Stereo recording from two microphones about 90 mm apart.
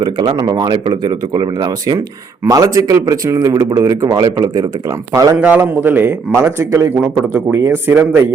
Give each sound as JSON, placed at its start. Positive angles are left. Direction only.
{"t": 0.0, "sound": "speech", "side_deg": -55}
{"t": 5.4, "sound": "a man's voice", "side_deg": -15}
{"t": 6.9, "sound": "a man's voice", "side_deg": -20}